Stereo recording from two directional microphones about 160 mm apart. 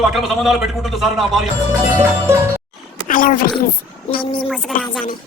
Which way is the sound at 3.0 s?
55° left (ahead or behind).